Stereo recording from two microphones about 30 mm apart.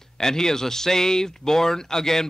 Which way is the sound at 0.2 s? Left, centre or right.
Centre.